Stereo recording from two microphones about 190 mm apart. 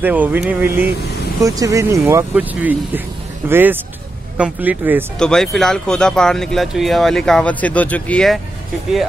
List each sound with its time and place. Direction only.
0.0 s speech: 10° right (ahead or behind)
5.2 s speech: 5° left (ahead or behind)